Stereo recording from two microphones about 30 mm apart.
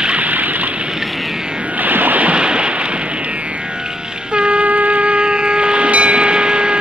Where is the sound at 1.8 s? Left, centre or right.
Right.